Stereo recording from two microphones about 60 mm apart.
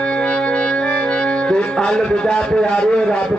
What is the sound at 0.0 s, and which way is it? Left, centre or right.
Music, centre.